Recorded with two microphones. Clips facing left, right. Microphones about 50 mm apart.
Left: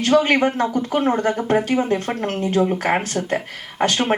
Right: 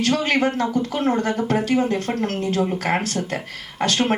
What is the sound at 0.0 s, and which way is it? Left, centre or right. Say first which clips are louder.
A woman's voice: left 4 dB; left.